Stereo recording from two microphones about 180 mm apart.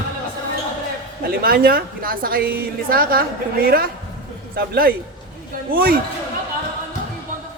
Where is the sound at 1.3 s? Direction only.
55° right (ahead or behind).